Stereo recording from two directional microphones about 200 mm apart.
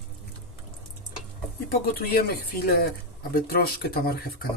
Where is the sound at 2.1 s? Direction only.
50° left (ahead or behind).